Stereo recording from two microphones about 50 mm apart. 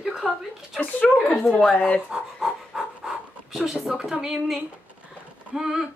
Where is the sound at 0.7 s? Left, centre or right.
Left.